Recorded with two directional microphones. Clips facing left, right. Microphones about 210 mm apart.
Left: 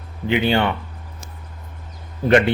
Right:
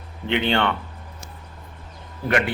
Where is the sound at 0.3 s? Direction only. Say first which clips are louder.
Left 3 dB; 5° left (ahead or behind).